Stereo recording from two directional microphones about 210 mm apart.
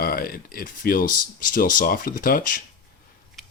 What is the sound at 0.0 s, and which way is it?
Speech, 45° left (ahead or behind).